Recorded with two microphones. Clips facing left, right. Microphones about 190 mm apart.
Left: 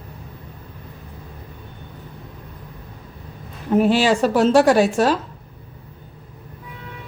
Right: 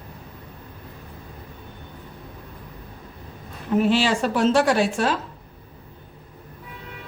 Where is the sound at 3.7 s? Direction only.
45° left (ahead or behind).